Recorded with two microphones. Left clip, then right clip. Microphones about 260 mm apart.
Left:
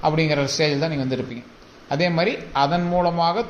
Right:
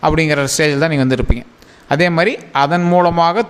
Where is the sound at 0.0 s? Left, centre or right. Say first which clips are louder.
Right 6 dB; right.